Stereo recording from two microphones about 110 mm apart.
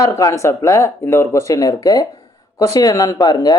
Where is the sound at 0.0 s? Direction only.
30° left (ahead or behind).